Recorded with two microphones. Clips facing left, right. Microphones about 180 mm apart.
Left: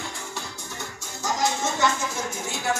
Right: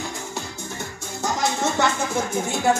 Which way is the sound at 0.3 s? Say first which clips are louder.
Right 4 dB; 55° right (ahead or behind).